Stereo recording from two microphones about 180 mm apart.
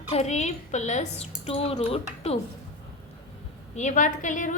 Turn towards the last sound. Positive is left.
turn(degrees=45)  # may be behind; listen again after turning